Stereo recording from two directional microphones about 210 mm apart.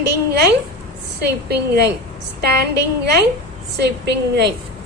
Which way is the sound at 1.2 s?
50° right (ahead or behind).